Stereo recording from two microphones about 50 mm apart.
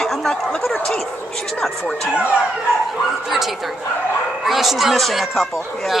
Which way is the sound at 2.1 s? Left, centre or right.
Right.